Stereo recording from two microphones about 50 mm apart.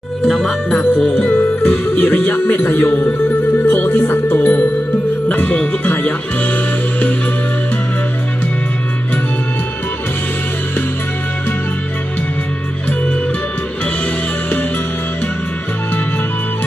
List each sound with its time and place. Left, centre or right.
0.3 s speech: centre
0.7 s music: left
2.0 s speech: left
3.6 s music: left